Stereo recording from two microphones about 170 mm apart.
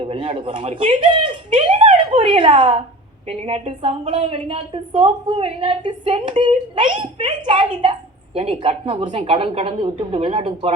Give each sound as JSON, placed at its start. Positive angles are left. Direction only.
{"t": 0.0, "sound": "a woman's voice", "side_deg": -35}